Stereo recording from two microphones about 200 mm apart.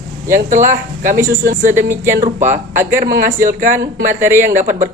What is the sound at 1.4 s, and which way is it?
Speech, 40° right (ahead or behind).